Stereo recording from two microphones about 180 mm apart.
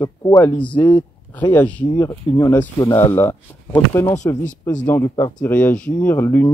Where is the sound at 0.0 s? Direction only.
20° left (ahead or behind).